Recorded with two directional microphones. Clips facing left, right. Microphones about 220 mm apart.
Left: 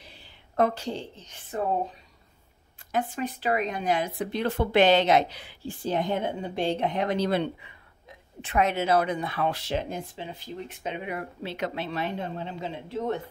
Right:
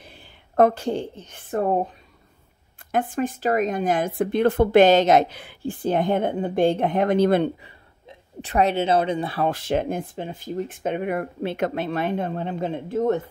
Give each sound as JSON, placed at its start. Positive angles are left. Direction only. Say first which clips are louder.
{"t": 0.0, "sound": "a woman's voice", "louder": "right 4 dB", "side_deg": -50}
{"t": 2.9, "sound": "speech", "louder": "right 5 dB", "side_deg": -55}
{"t": 8.1, "sound": "speech", "louder": "right 4 dB", "side_deg": -35}